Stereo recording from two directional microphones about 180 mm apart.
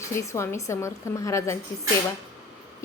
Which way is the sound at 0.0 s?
15° left (ahead or behind).